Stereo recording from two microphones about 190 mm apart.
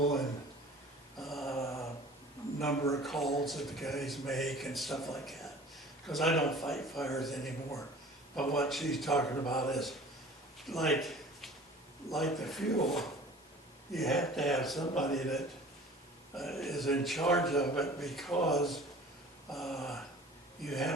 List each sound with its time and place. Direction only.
1.2 s mantra: centre (ahead or behind)
1.6 s mantra: 15° left (ahead or behind)
2.6 s a man's voice: 15° left (ahead or behind)
3.0 s a man's voice: centre (ahead or behind)
10.7 s a sound: centre (ahead or behind)
12.0 s a man's voice: centre (ahead or behind)